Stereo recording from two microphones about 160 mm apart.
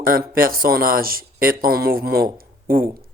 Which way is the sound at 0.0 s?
65° right (ahead or behind).